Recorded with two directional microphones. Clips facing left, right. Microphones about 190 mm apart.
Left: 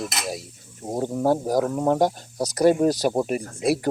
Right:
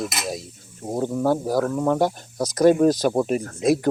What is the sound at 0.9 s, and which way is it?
Speech, 25° left (ahead or behind).